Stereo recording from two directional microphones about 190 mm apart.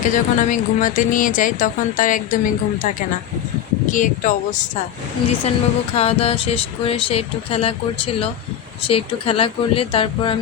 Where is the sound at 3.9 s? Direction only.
45° left (ahead or behind).